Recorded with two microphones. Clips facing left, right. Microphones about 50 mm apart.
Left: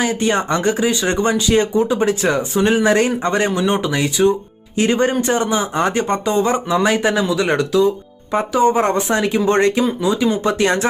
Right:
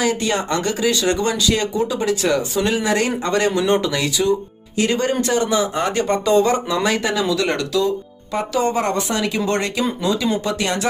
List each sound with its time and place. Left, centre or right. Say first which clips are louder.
0.0 s speech: left 2 dB; left